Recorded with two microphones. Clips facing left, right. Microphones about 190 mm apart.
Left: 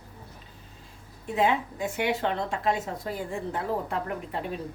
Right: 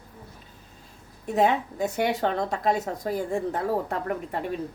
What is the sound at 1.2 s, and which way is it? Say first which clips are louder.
A woman's voice: right 3 dB; 40° right (ahead or behind).